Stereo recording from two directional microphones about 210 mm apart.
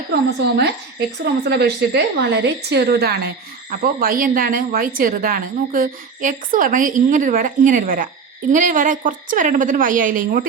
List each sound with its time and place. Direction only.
0.1 s a woman's voice: 50° right (ahead or behind)